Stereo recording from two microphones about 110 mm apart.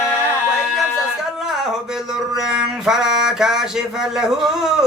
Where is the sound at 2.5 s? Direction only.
5° right (ahead or behind).